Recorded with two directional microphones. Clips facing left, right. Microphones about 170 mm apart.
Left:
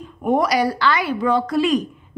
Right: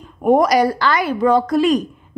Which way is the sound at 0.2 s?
45° right (ahead or behind).